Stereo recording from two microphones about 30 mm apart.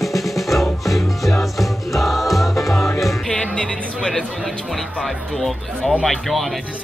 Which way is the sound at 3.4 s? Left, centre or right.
Left.